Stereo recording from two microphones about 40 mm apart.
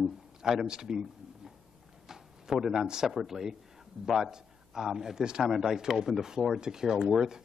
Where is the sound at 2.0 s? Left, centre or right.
Centre.